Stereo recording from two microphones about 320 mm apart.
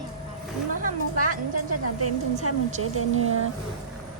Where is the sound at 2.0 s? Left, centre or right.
Right.